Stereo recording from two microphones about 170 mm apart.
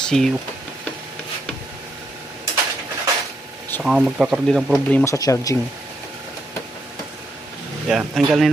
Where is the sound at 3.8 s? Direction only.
Centre (ahead or behind).